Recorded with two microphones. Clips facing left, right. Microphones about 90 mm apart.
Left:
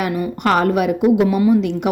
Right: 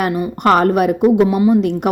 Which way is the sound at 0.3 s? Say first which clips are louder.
Right 4 dB; 45° right (ahead or behind).